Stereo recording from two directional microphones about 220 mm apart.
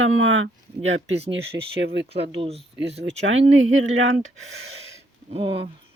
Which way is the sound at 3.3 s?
65° right (ahead or behind).